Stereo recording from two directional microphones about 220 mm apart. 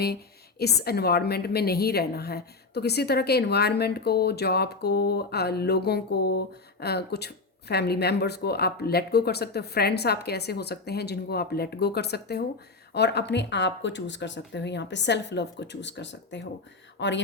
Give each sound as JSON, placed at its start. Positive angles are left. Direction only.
{"t": 0.6, "sound": "a woman's voice", "side_deg": 45}